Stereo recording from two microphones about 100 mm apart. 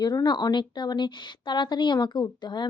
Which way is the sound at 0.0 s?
45° left (ahead or behind).